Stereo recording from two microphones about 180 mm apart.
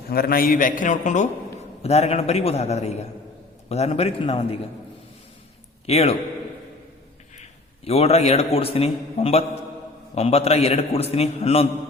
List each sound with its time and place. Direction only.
0.1 s a man's voice: 55° left (ahead or behind); by 4.6 s 35° left (ahead or behind)
5.8 s a man's voice: 35° left (ahead or behind)
7.9 s a man's voice: 35° left (ahead or behind)